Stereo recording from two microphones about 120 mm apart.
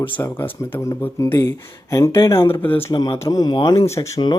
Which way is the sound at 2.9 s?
35° left (ahead or behind).